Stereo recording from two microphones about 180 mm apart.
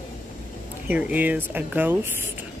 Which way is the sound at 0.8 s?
10° right (ahead or behind).